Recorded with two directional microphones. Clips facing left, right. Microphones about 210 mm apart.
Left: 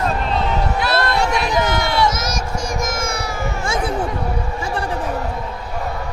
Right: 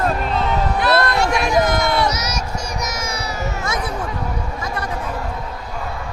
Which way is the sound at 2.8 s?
50° left (ahead or behind).